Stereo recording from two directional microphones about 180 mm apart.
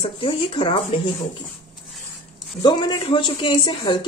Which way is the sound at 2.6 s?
25° left (ahead or behind).